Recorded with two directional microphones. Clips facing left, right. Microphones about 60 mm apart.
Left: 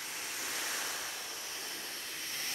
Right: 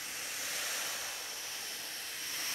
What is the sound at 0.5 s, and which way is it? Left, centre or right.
Waves, centre.